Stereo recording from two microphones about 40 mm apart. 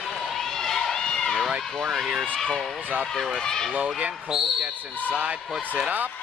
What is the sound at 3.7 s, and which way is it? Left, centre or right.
Speech, right.